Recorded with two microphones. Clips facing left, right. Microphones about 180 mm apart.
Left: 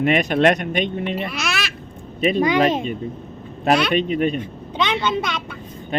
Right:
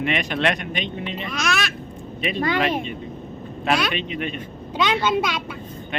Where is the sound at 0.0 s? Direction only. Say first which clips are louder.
Left 6 dB; 40° left (ahead or behind).